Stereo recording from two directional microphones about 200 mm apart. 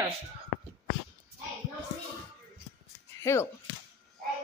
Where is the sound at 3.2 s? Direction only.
15° left (ahead or behind).